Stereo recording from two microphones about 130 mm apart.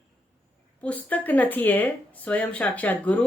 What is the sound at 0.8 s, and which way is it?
Speech, 10° left (ahead or behind).